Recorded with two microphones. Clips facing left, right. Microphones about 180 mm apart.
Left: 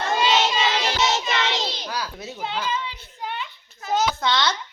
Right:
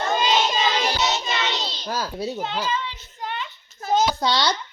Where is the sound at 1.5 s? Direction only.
90° left.